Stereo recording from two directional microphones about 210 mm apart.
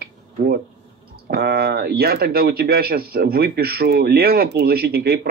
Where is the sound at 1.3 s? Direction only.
50° right (ahead or behind).